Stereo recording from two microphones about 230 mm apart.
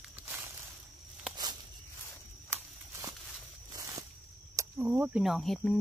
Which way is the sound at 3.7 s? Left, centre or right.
Centre.